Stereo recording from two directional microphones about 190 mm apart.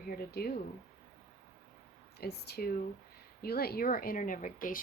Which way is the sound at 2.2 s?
55° left (ahead or behind).